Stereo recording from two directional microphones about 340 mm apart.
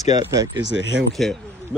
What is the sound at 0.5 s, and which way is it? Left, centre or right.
Speech, right.